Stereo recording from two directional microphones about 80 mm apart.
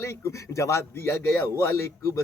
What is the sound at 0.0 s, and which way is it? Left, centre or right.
Speech, left.